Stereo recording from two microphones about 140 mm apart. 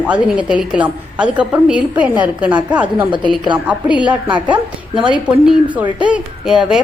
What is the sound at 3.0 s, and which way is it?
Speech, 35° right (ahead or behind).